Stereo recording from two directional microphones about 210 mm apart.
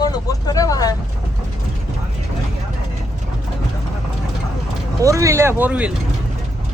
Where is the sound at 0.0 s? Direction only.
20° left (ahead or behind).